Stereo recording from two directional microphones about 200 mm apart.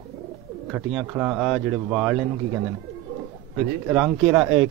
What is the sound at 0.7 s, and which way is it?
Speech, 5° right (ahead or behind).